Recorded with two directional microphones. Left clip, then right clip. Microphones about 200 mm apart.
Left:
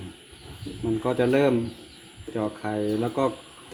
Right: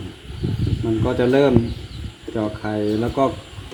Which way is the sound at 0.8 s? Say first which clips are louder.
Right 4 dB; centre (ahead or behind).